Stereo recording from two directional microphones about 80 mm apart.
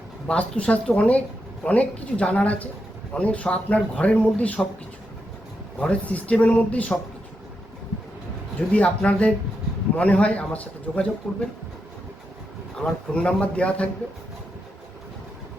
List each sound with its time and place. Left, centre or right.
0.3 s speech: centre
5.8 s speech: centre
8.5 s speech: centre
12.7 s speech: centre